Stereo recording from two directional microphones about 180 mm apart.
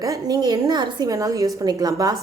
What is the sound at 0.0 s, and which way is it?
A woman's voice, 20° right (ahead or behind).